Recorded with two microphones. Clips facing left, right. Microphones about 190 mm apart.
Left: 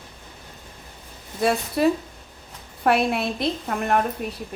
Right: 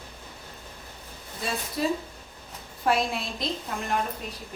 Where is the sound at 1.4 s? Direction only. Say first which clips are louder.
Left 9 dB; 65° left (ahead or behind).